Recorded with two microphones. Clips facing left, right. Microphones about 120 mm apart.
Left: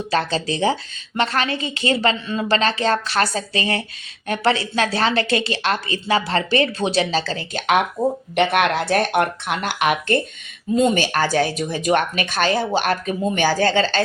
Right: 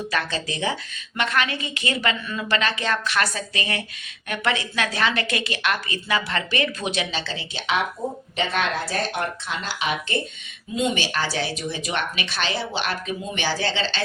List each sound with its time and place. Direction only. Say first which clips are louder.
0.1 s a woman's voice: left 10 dB; 30° left (ahead or behind); by 7.9 s 50° left (ahead or behind)
8.4 s speech: left 6 dB; 65° left (ahead or behind)
10.8 s speech: left 6 dB; 45° left (ahead or behind)